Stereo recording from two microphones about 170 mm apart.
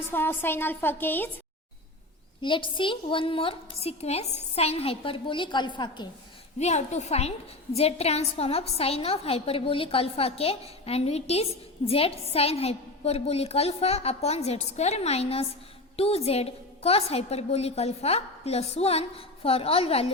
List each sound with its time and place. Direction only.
0.1 s a woman's voice: 10° left (ahead or behind)
2.4 s a woman's voice: 30° left (ahead or behind)
6.6 s a woman's voice: 40° left (ahead or behind)